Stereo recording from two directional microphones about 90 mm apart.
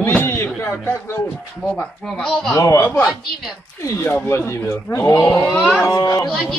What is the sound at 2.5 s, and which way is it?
Speech, 35° left (ahead or behind).